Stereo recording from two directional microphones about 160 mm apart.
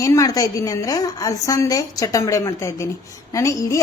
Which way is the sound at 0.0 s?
20° left (ahead or behind).